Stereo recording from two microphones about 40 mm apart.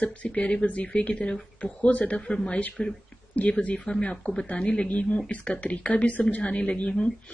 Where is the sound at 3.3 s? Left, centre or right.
Left.